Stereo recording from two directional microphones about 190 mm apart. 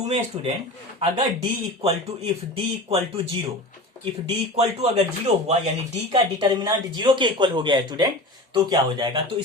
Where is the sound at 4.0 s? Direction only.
30° right (ahead or behind).